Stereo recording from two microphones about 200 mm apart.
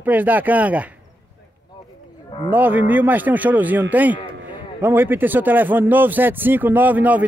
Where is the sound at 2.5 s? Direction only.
10° right (ahead or behind).